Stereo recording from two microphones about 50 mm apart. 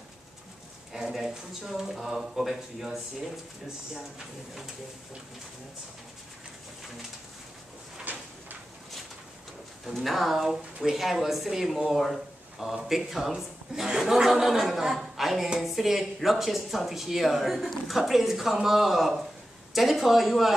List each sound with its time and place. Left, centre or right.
0.9 s speech: centre
8.0 s a sound: right
9.9 s speech: centre